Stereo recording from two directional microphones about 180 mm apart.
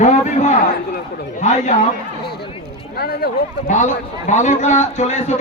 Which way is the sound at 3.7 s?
45° left (ahead or behind).